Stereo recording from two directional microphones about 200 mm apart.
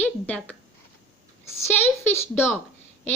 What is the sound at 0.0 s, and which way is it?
A woman's voice, 5° left (ahead or behind).